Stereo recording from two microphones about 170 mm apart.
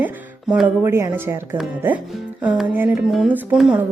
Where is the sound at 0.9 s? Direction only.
15° right (ahead or behind).